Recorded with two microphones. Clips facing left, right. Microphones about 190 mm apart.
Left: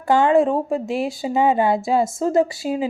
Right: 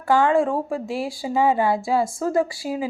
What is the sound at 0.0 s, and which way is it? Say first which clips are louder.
Speech: left 3 dB; 20° left (ahead or behind).